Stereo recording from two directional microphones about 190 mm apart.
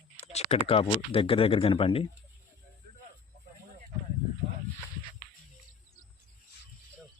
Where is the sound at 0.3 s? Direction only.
30° left (ahead or behind).